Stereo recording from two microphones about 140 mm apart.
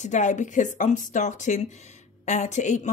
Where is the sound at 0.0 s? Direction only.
60° left (ahead or behind).